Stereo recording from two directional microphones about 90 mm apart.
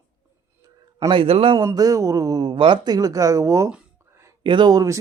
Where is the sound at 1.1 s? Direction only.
90° right.